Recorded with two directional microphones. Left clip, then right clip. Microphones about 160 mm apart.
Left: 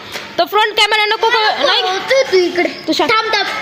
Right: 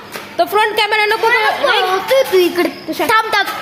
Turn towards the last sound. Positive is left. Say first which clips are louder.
# even
turn(degrees=-45)  # may be behind; listen again after turning